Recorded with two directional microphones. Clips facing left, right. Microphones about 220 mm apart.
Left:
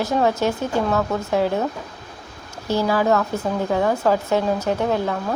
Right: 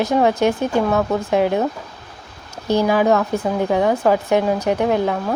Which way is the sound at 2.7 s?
15° right (ahead or behind).